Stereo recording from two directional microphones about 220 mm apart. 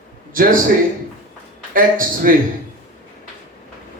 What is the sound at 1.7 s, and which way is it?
Speech, 40° right (ahead or behind).